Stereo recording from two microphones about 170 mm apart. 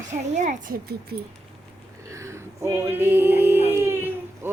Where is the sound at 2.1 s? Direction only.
15° right (ahead or behind).